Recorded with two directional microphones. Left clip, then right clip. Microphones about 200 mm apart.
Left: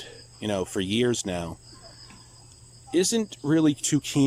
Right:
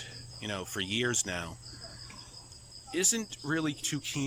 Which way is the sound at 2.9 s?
25° left (ahead or behind).